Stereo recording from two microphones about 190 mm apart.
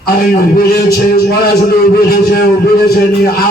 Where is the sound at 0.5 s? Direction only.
55° left (ahead or behind).